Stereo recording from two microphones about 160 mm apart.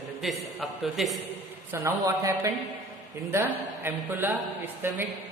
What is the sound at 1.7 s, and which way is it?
A woman's voice, 15° right (ahead or behind).